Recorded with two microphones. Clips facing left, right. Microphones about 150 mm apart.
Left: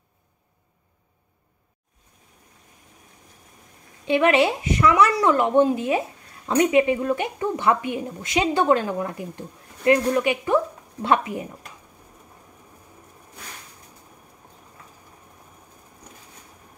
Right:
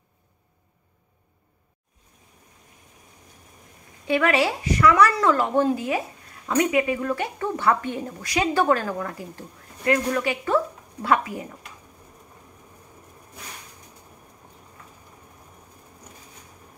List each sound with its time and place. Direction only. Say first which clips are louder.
4.1 s speech: left 3 dB; 20° left (ahead or behind)